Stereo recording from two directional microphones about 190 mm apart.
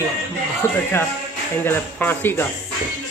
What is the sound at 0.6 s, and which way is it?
Speech, 15° left (ahead or behind).